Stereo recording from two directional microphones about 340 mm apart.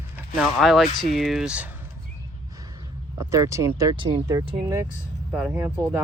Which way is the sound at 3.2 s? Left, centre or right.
Centre.